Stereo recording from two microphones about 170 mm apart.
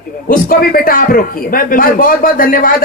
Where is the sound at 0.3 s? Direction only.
60° left (ahead or behind).